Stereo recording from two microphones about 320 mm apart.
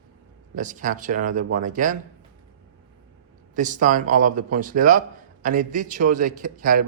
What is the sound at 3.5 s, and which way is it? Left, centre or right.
Speech, right.